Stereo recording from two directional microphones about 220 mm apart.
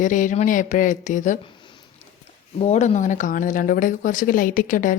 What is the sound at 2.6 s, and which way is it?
Speech, 30° left (ahead or behind).